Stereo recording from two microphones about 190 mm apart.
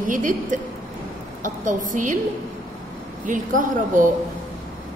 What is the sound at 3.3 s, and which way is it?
Speech, 45° right (ahead or behind).